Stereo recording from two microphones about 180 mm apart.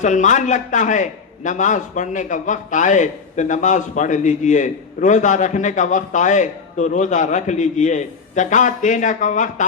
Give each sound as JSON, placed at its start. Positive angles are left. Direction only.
{"t": 0.0, "sound": "a man's voice", "side_deg": 45}